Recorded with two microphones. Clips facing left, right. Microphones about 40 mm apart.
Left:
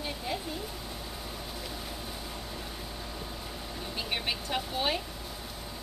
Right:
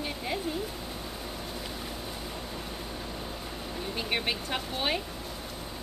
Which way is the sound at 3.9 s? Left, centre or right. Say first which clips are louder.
Right 2 dB; centre.